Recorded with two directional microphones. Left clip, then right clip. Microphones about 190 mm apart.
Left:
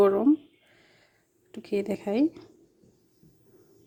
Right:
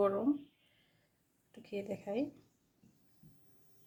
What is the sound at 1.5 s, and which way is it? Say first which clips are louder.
Speech: left 12 dB; 55° left (ahead or behind).